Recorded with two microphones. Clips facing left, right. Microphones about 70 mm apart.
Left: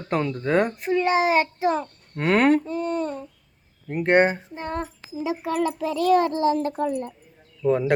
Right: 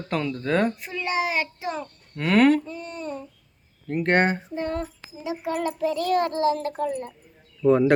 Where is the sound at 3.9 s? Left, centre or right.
Centre.